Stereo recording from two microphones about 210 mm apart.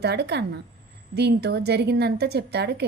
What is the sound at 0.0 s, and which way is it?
A woman's voice, 50° right (ahead or behind).